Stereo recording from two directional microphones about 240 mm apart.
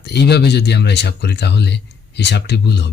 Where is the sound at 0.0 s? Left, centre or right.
Left.